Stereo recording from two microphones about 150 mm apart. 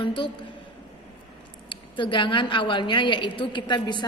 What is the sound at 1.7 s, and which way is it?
A woman's voice, 35° left (ahead or behind).